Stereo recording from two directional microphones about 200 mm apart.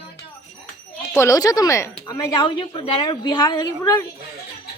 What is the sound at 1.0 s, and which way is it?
Music, 15° left (ahead or behind).